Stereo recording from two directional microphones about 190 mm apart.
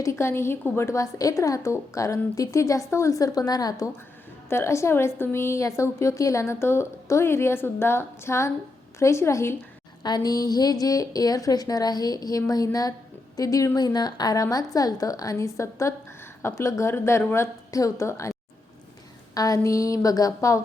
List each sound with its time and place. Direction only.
0.0 s a woman's voice: 15° left (ahead or behind)